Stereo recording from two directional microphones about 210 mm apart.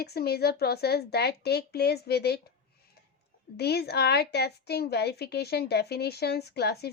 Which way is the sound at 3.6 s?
50° left (ahead or behind).